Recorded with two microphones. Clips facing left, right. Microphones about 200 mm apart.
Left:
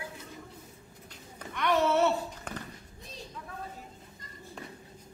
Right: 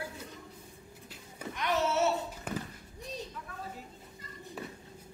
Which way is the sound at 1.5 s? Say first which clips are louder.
Left 4 dB; 60° left (ahead or behind).